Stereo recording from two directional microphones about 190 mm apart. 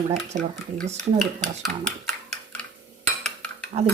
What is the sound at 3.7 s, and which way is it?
Speech, 30° right (ahead or behind).